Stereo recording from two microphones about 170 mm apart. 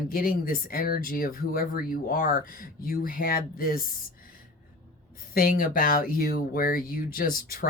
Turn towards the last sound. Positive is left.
turn(degrees=55)  # may be behind; listen again after turning